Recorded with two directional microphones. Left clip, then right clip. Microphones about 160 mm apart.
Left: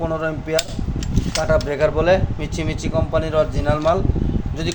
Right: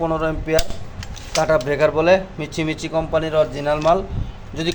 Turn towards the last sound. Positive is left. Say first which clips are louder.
# right 1 dB
turn(degrees=-10)  # may be behind; listen again after turning